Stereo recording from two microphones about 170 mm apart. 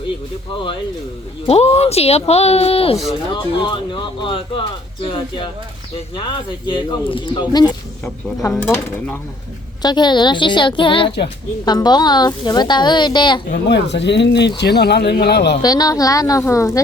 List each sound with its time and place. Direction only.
1.5 s speech: 40° left (ahead or behind)
6.1 s a woman's voice: 25° left (ahead or behind)
8.4 s speech: 10° left (ahead or behind)
9.8 s a woman's voice: 25° left (ahead or behind)
13.5 s speech: 90° left
14.6 s speech: 75° left (ahead or behind)
15.6 s a woman's voice: 25° left (ahead or behind)